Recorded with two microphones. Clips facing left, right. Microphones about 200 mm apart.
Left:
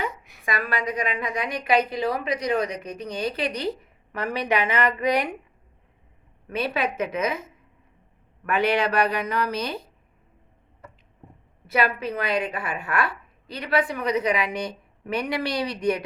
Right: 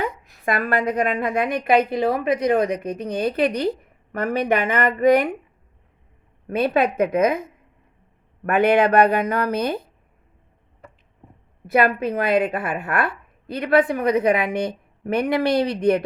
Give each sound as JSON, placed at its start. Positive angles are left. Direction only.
{"t": 0.4, "sound": "a woman's voice", "side_deg": -55}
{"t": 6.7, "sound": "a woman's voice", "side_deg": -55}
{"t": 11.6, "sound": "a woman's voice", "side_deg": -50}